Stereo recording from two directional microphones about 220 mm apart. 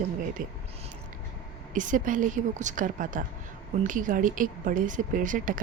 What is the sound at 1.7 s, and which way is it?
Speech, 35° right (ahead or behind).